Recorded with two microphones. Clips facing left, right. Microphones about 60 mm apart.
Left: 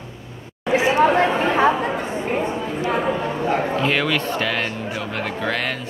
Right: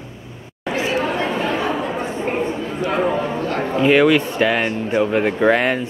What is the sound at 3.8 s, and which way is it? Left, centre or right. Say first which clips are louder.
Speech: right 7 dB; centre.